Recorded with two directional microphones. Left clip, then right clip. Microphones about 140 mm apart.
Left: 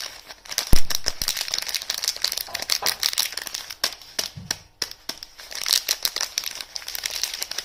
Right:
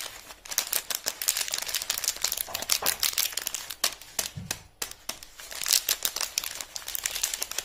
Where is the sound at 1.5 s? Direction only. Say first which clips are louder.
Left 4 dB; 30° left (ahead or behind).